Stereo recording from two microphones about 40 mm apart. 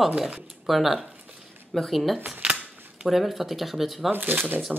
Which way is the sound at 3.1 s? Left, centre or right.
Centre.